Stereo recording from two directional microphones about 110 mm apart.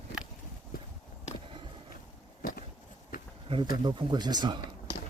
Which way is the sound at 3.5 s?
45° right (ahead or behind).